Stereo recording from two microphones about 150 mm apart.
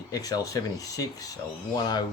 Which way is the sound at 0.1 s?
25° left (ahead or behind).